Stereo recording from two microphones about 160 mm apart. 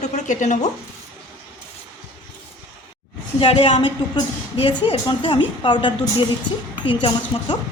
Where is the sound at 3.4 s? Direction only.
35° left (ahead or behind).